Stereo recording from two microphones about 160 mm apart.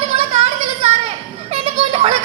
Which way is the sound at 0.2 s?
40° right (ahead or behind).